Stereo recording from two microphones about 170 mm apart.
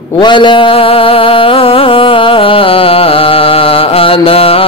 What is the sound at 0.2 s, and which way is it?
Music, 30° left (ahead or behind).